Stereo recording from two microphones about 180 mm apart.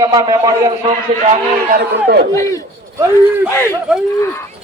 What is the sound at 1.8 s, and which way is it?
Speech, 60° right (ahead or behind).